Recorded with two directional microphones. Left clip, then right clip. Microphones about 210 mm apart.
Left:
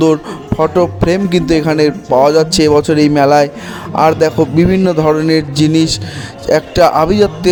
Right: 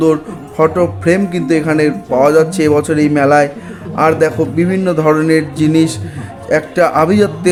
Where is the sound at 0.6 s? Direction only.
35° left (ahead or behind).